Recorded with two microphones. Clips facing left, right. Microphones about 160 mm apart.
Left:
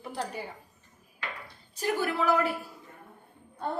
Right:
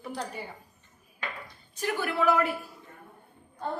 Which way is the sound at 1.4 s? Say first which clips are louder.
Left 2 dB; 35° left (ahead or behind).